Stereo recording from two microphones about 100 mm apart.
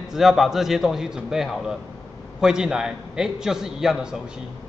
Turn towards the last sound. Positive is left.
turn(degrees=-5)  # may be behind; listen again after turning